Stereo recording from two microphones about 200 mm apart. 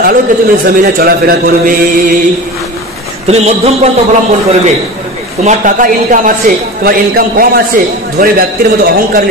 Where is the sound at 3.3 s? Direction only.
30° right (ahead or behind).